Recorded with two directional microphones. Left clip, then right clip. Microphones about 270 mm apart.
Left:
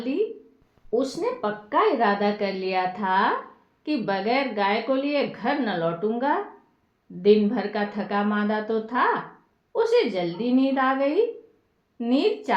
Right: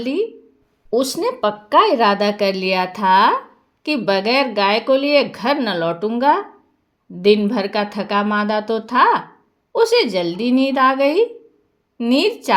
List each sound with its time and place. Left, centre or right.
0.9 s speech: right